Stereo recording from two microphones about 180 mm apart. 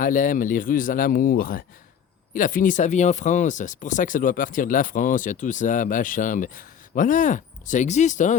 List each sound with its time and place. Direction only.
0.0 s speech: 50° left (ahead or behind)